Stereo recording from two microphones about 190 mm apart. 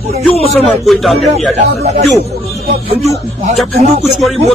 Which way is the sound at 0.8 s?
Centre (ahead or behind).